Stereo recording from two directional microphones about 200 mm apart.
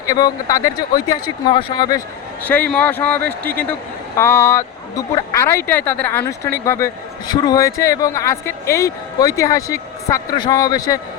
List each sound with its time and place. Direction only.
0.0 s speech: 15° left (ahead or behind)
2.4 s speech: 10° left (ahead or behind)